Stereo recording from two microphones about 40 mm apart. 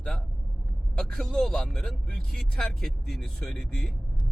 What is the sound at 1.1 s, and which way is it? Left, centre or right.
Speech, centre.